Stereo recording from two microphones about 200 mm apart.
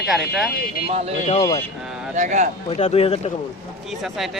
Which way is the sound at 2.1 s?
40° right (ahead or behind).